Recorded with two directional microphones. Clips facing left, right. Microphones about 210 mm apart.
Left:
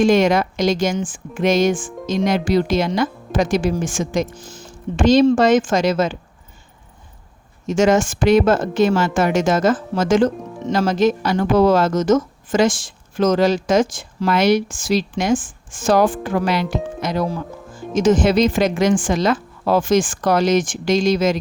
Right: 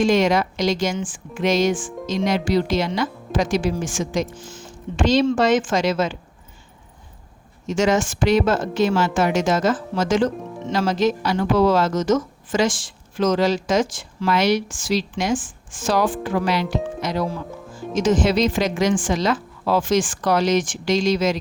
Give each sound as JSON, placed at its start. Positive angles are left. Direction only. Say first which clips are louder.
{"t": 0.0, "sound": "speech", "louder": "left 3 dB", "side_deg": 50}
{"t": 7.7, "sound": "speech", "louder": "left 4 dB", "side_deg": 50}